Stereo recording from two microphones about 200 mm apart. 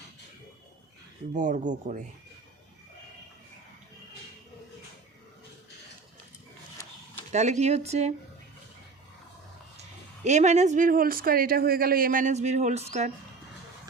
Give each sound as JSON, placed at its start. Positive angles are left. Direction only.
{"t": 1.3, "sound": "speech", "side_deg": -40}
{"t": 7.3, "sound": "speech", "side_deg": -35}
{"t": 10.2, "sound": "speech", "side_deg": -35}